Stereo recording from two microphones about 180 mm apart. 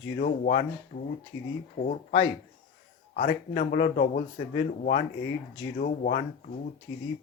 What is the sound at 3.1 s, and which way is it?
Speech, 50° left (ahead or behind).